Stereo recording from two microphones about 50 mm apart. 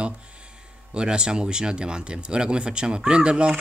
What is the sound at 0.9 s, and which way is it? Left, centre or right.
Speech, centre.